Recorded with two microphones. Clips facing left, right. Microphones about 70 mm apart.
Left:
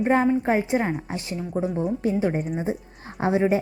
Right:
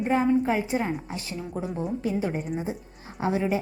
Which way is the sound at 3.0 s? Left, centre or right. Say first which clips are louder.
Left 4 dB; left.